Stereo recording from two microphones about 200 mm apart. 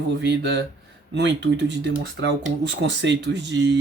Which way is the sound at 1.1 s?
60° right (ahead or behind).